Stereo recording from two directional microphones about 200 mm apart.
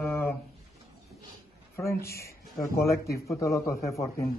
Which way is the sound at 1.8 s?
15° left (ahead or behind).